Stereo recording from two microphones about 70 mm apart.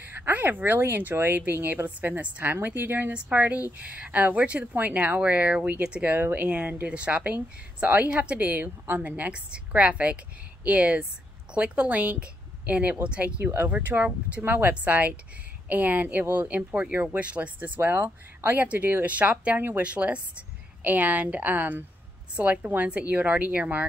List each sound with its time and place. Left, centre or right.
0.0 s speech: right